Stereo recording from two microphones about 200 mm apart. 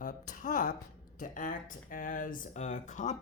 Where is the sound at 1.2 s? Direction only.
40° left (ahead or behind).